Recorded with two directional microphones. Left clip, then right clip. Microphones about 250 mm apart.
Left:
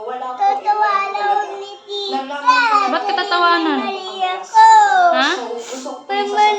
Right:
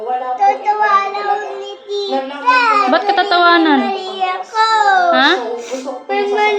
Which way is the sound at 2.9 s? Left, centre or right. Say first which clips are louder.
Right 5 dB; right.